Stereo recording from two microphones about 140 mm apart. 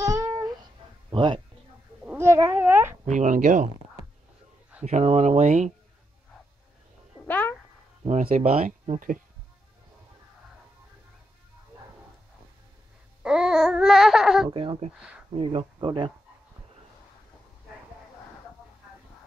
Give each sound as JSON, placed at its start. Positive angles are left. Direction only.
{"t": 0.1, "sound": "a sound", "side_deg": -20}
{"t": 1.1, "sound": "speech", "side_deg": -35}
{"t": 2.0, "sound": "cat", "side_deg": -20}
{"t": 3.1, "sound": "speech", "side_deg": -60}
{"t": 4.8, "sound": "speech", "side_deg": -50}
{"t": 7.2, "sound": "cat", "side_deg": 10}
{"t": 8.0, "sound": "speech", "side_deg": -45}
{"t": 13.2, "sound": "babbling", "side_deg": -5}
{"t": 14.5, "sound": "speech", "side_deg": -40}
{"t": 15.0, "sound": "speech", "side_deg": -10}
{"t": 15.3, "sound": "speech", "side_deg": -40}